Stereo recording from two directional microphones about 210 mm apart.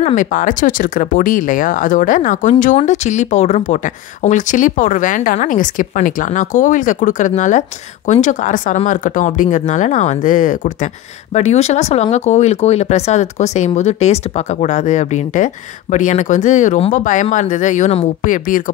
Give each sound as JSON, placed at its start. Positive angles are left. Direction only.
{"t": 0.0, "sound": "speech", "side_deg": 40}